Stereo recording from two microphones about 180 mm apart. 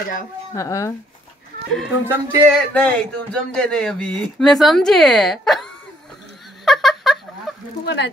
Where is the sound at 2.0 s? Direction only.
10° right (ahead or behind).